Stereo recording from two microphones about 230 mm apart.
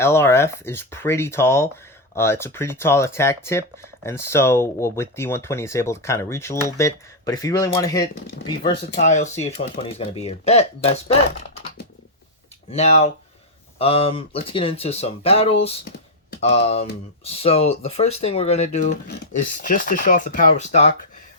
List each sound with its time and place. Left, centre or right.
0.0 s speech: centre
8.7 s speech: left
9.0 s speech: left
12.7 s speech: left
18.9 s speech: left